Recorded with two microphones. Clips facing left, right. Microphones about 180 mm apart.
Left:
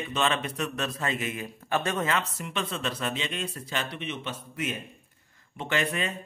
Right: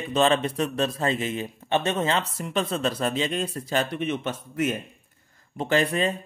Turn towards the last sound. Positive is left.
turn(degrees=-35)  # may be behind; listen again after turning